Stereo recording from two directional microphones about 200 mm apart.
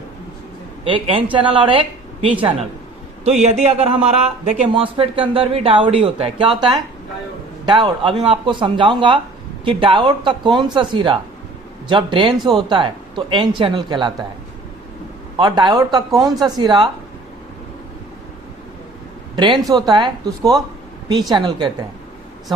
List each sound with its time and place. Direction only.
0.9 s speech: 25° right (ahead or behind)
3.4 s speech: 30° right (ahead or behind)
15.4 s speech: 20° right (ahead or behind)
19.4 s speech: 20° right (ahead or behind)